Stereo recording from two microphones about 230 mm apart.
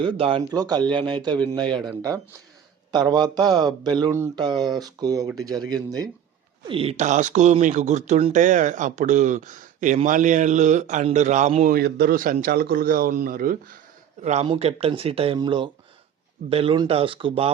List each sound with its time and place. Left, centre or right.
0.0 s speech: right